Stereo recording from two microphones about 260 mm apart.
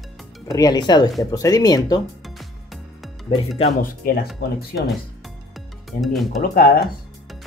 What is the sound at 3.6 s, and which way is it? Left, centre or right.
Speech, left.